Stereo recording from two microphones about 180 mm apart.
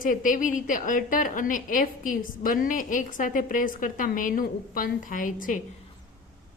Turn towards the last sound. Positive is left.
turn(degrees=50)  # may be behind; listen again after turning